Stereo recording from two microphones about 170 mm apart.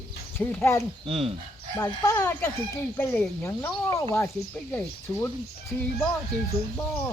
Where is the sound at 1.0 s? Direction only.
35° right (ahead or behind).